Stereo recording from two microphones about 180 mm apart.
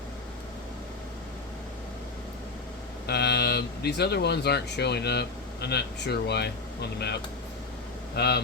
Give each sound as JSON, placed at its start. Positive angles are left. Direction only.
{"t": 3.1, "sound": "speech", "side_deg": 65}